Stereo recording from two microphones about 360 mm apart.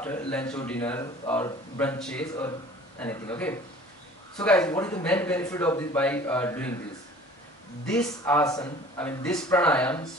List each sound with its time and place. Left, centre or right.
0.0 s speech: centre
7.8 s speech: centre